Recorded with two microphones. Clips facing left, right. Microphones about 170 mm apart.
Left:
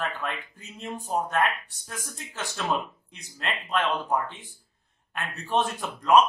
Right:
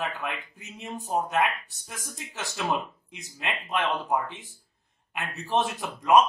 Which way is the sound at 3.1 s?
15° right (ahead or behind).